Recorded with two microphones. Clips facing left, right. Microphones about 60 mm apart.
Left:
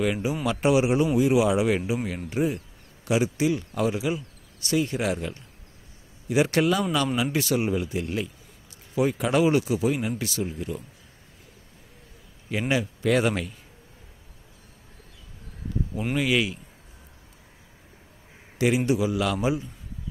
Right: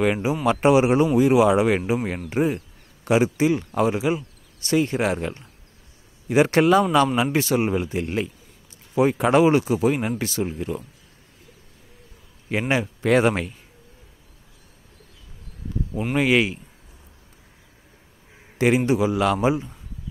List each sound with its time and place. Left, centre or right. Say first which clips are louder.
0.0 s speech: right 4 dB; right
0.3 s speech: right 6 dB; right
9.8 s speech: right 4 dB; right
12.4 s speech: right 3 dB; right
16.2 s speech: right 5 dB; right
18.9 s speech: right 4 dB; right